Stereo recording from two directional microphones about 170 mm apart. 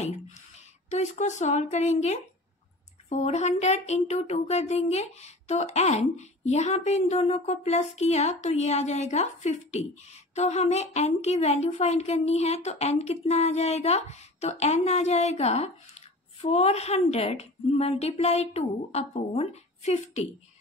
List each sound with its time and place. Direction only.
0.8 s a woman's voice: 40° left (ahead or behind)